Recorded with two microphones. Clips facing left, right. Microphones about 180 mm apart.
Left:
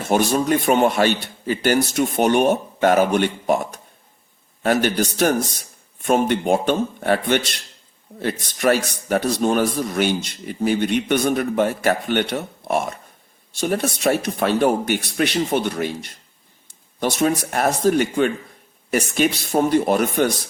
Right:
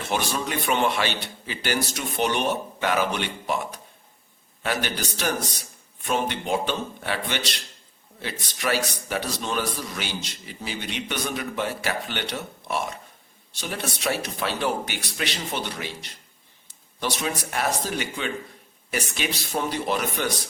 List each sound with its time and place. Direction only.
0.0 s a man's voice: 45° left (ahead or behind)